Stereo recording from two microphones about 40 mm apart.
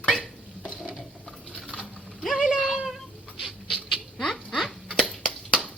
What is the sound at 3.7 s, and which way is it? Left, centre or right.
Rodents, centre.